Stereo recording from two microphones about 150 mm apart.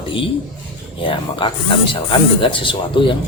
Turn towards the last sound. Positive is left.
turn(degrees=35)  # may be behind; listen again after turning